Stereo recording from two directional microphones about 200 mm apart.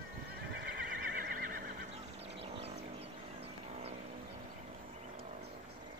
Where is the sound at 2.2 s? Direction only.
30° right (ahead or behind).